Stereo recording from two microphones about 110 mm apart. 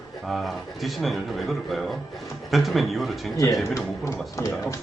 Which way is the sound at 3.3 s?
30° left (ahead or behind).